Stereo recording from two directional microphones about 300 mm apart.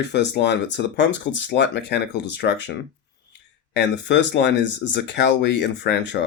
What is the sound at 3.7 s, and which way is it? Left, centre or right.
Speech, left.